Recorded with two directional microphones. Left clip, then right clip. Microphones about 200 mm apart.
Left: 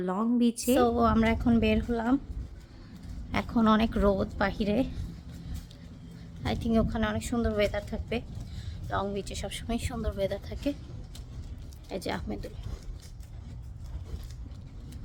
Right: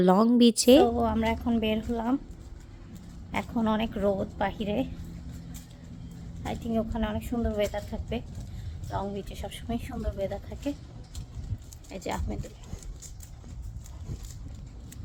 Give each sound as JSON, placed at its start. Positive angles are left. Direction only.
{"t": 0.0, "sound": "speech", "side_deg": -40}
{"t": 0.9, "sound": "a woman's voice", "side_deg": 20}
{"t": 3.3, "sound": "speech", "side_deg": 20}
{"t": 6.4, "sound": "speech", "side_deg": 20}
{"t": 11.9, "sound": "a woman's voice", "side_deg": 5}